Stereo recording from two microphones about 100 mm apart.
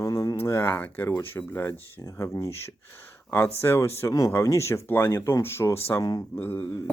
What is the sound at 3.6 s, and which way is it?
Speech, 25° left (ahead or behind).